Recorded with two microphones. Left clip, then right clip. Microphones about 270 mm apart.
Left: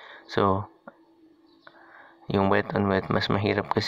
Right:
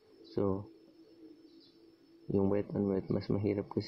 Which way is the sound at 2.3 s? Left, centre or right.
Left.